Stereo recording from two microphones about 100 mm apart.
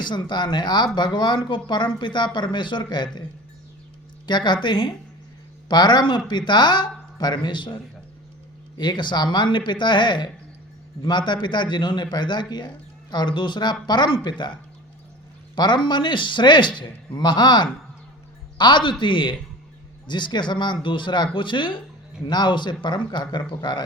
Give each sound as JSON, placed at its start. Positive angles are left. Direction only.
{"t": 0.0, "sound": "speech", "side_deg": 50}
{"t": 4.3, "sound": "speech", "side_deg": 50}
{"t": 8.8, "sound": "speech", "side_deg": 50}
{"t": 15.5, "sound": "speech", "side_deg": 50}